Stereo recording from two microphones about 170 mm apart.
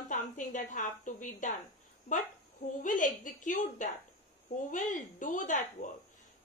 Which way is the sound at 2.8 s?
50° left (ahead or behind).